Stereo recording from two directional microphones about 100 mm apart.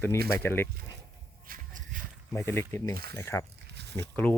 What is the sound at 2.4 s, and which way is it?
Speech, 25° left (ahead or behind).